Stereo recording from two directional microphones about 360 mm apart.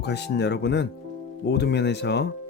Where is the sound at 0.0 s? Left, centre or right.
Left.